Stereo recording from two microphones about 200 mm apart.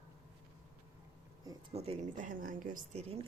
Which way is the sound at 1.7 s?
30° right (ahead or behind).